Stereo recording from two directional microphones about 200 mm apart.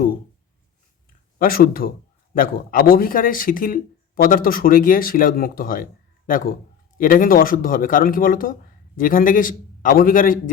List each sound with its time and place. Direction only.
1.4 s speech: 45° left (ahead or behind)